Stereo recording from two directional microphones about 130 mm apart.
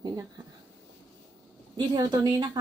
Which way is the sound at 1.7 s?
35° right (ahead or behind).